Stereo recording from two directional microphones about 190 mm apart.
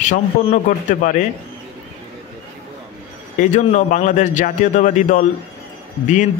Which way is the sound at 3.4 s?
40° left (ahead or behind).